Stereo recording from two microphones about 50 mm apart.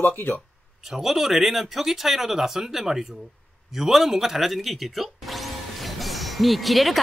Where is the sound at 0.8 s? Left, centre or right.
Centre.